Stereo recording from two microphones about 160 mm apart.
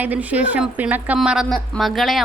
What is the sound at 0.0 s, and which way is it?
A woman's voice, 10° right (ahead or behind).